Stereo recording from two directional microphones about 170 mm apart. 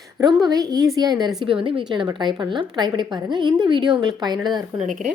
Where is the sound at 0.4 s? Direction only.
20° right (ahead or behind).